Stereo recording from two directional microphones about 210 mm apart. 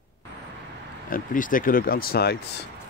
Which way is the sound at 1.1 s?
40° left (ahead or behind).